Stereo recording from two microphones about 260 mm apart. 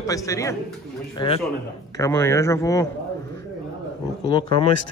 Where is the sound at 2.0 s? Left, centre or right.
Centre.